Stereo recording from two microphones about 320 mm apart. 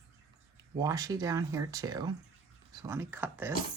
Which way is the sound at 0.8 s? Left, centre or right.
Centre.